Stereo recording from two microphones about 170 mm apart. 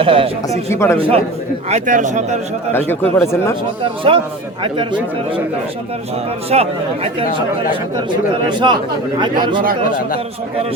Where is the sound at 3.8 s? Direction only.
30° right (ahead or behind).